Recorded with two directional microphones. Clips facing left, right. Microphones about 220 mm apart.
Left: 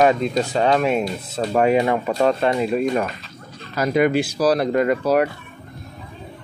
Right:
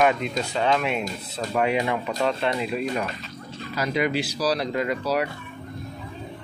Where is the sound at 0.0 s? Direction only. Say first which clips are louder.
Left 5 dB; 35° left (ahead or behind); by 5.3 s 50° left (ahead or behind).